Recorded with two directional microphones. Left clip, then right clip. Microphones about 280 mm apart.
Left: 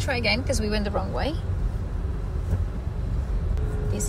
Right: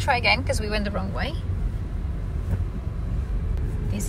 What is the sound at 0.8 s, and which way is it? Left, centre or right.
Speech, centre.